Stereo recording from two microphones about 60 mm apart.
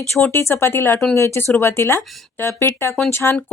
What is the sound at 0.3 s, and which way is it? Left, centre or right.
A woman's voice, left.